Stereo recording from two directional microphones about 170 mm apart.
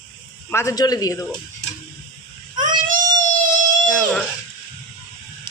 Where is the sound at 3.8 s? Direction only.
5° left (ahead or behind).